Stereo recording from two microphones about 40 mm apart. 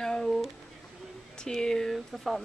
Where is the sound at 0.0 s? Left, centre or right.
Centre.